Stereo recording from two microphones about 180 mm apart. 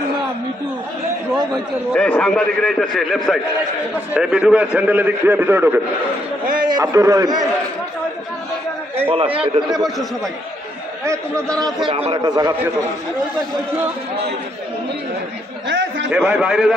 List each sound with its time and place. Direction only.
1.9 s a man's voice: 5° left (ahead or behind); by 5.8 s 10° right (ahead or behind)
6.6 s a man's voice: 25° right (ahead or behind)
9.0 s a man's voice: 30° right (ahead or behind)
11.9 s a man's voice: 35° right (ahead or behind)
12.1 s a man's voice: 20° right (ahead or behind)
15.6 s chatter: 80° right
16.1 s a man's voice: 5° right (ahead or behind)